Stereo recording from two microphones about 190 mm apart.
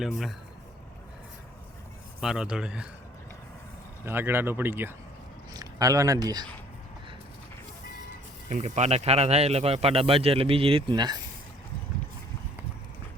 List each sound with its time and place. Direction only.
0.0 s a man's voice: centre (ahead or behind)
2.2 s a man's voice: 5° right (ahead or behind)
4.0 s speech: 10° right (ahead or behind)
8.4 s a man's voice: 40° right (ahead or behind); by 11.2 s 20° right (ahead or behind)